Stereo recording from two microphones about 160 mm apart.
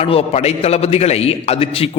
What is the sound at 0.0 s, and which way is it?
A man's voice, 40° left (ahead or behind).